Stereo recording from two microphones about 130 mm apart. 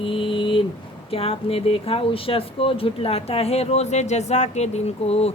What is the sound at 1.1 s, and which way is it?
Speech, 50° left (ahead or behind).